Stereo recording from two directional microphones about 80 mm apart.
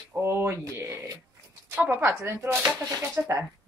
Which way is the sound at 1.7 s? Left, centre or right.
Right.